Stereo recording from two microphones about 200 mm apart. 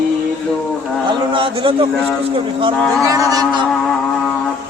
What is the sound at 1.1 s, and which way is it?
Speech, 25° right (ahead or behind).